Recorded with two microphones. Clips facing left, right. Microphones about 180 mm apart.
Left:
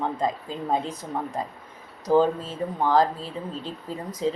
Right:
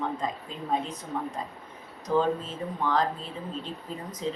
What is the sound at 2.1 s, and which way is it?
Speech, 35° left (ahead or behind).